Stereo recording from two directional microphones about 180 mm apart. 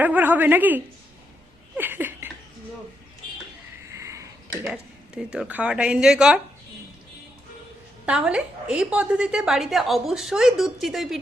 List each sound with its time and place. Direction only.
0.0 s a woman's voice: 10° right (ahead or behind)
1.7 s laughter: 10° right (ahead or behind)
3.9 s a sound: 15° right (ahead or behind)
4.7 s a woman's voice: 5° right (ahead or behind)
8.0 s a woman's voice: 5° right (ahead or behind)